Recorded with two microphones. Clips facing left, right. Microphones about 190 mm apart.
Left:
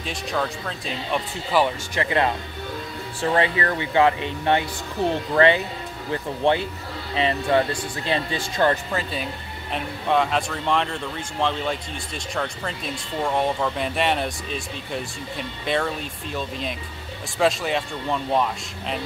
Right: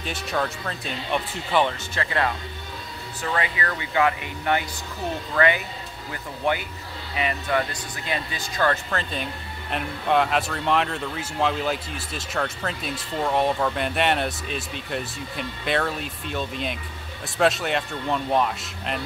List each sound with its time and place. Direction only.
0.0 s speech: centre (ahead or behind)
2.0 s speech: 20° left (ahead or behind)
8.9 s speech: 5° left (ahead or behind)